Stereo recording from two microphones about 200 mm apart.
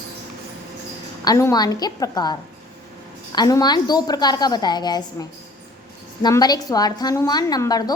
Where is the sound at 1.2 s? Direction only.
15° left (ahead or behind).